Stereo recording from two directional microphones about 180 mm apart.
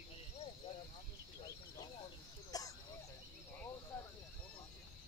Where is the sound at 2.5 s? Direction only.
20° left (ahead or behind).